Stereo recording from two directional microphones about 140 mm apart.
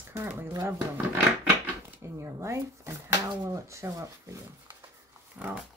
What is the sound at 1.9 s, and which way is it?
Speech, 20° right (ahead or behind).